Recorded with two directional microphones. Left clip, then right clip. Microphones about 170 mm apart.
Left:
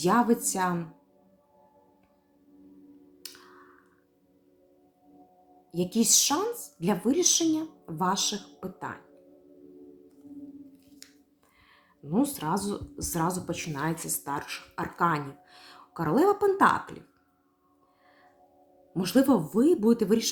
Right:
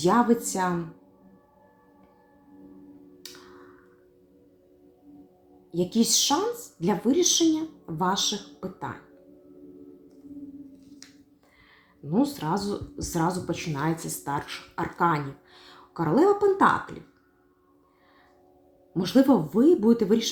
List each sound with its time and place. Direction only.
0.0 s speech: 15° left (ahead or behind)
5.7 s speech: 15° left (ahead or behind)
12.0 s speech: 15° left (ahead or behind)
18.9 s speech: 15° left (ahead or behind)